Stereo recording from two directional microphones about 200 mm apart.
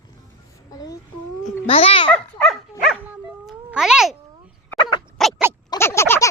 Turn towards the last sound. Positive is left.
turn(degrees=10)  # may be behind; listen again after turning